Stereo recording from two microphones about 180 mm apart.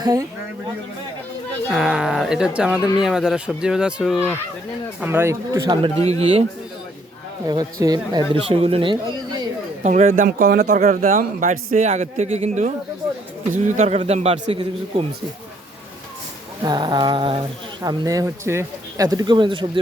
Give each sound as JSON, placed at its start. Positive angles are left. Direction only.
{"t": 0.0, "sound": "speech", "side_deg": -20}
{"t": 1.7, "sound": "speech", "side_deg": -5}
{"t": 7.4, "sound": "speech", "side_deg": -20}
{"t": 9.8, "sound": "speech", "side_deg": -45}
{"t": 13.7, "sound": "a man's voice", "side_deg": -35}
{"t": 16.6, "sound": "speech", "side_deg": -25}